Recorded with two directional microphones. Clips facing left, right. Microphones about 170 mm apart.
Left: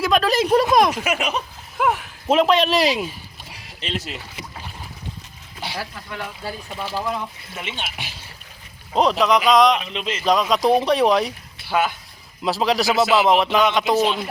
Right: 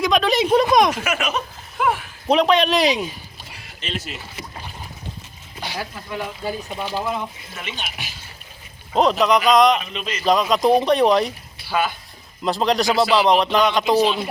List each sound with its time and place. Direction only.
0.0 s speech: centre (ahead or behind)
1.0 s speech: 15° left (ahead or behind)
1.8 s speech: 5° left (ahead or behind)
3.8 s speech: 35° left (ahead or behind)
5.7 s speech: 15° right (ahead or behind)
7.0 s a man's voice: 5° right (ahead or behind)
7.8 s speech: 25° left (ahead or behind)
8.9 s a man's voice: centre (ahead or behind)
9.8 s speech: 20° left (ahead or behind)
10.2 s a man's voice: centre (ahead or behind)
12.4 s a man's voice: 5° left (ahead or behind)